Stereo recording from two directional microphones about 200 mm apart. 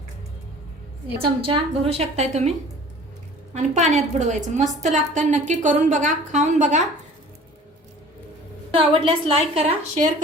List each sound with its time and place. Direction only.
1.2 s a woman's voice: 25° right (ahead or behind)
3.5 s a woman's voice: 35° right (ahead or behind)
8.7 s a woman's voice: 25° right (ahead or behind)